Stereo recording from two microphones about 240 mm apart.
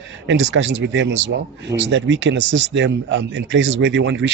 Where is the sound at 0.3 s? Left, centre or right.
Right.